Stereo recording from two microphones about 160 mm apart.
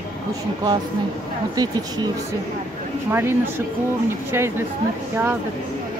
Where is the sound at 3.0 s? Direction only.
15° right (ahead or behind).